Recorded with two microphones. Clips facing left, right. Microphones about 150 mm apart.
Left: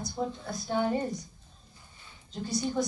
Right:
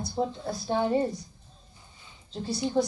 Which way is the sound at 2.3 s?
30° right (ahead or behind).